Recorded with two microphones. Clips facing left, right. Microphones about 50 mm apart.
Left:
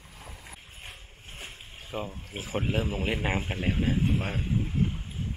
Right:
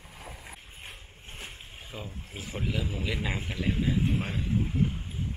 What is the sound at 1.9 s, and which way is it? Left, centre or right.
Speech, left.